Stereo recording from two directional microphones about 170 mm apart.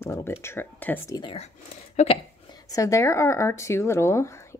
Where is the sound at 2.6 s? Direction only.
20° left (ahead or behind).